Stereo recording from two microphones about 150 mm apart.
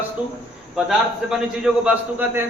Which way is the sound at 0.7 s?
5° right (ahead or behind).